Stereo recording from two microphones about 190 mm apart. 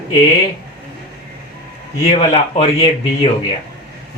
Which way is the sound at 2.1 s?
35° left (ahead or behind).